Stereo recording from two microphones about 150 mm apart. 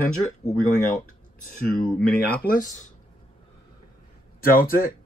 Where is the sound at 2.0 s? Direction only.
75° left (ahead or behind); by 2.8 s 60° left (ahead or behind).